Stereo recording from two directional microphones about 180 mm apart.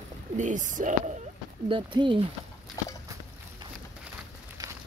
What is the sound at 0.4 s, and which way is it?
Speech, 45° right (ahead or behind).